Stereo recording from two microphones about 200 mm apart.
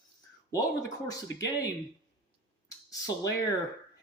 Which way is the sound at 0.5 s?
20° left (ahead or behind).